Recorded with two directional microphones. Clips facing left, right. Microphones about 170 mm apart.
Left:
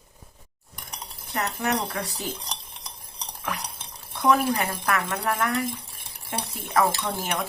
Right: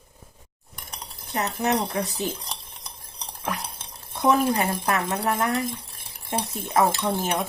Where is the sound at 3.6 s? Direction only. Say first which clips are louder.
Even; 25° right (ahead or behind).